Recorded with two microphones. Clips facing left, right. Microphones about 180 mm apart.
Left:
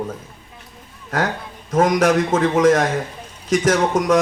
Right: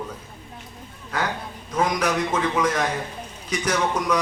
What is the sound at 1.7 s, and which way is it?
A man's voice, 45° left (ahead or behind).